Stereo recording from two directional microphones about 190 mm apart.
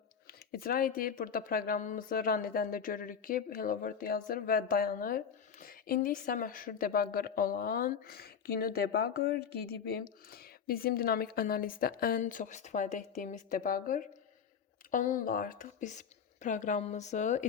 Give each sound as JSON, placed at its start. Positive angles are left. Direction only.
{"t": 0.3, "sound": "speech", "side_deg": 50}